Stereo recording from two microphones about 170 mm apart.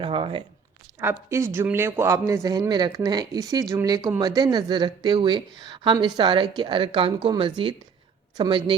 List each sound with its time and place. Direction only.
0.0 s speech: 30° right (ahead or behind)
1.0 s speech: 15° right (ahead or behind)